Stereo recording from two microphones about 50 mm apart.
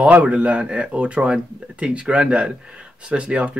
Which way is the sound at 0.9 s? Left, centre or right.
Right.